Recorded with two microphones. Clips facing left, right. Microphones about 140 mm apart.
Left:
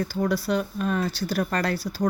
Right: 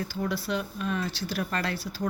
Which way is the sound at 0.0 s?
40° left (ahead or behind).